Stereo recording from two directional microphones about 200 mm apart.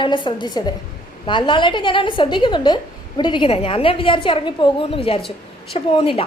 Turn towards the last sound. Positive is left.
turn(degrees=30)  # may be behind; listen again after turning